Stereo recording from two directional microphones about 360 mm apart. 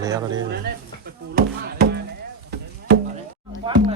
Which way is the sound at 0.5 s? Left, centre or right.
Right.